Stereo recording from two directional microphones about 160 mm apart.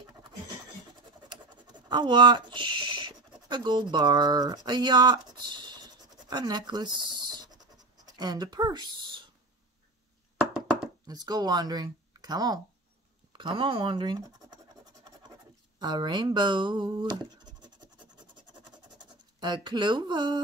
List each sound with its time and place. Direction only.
1.3 s scratch: 30° right (ahead or behind)
10.3 s a sound: 5° right (ahead or behind)
11.1 s speech: 25° right (ahead or behind)
15.8 s speech: 30° right (ahead or behind)
19.4 s speech: 30° right (ahead or behind)